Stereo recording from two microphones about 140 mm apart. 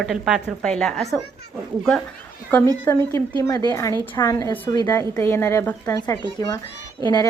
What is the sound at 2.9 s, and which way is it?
A woman's voice, 20° left (ahead or behind).